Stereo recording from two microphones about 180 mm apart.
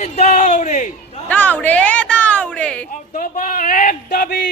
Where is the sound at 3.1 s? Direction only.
50° left (ahead or behind).